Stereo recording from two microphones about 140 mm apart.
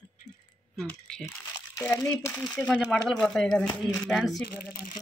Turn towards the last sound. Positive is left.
turn(degrees=0)  # may be behind; listen again after turning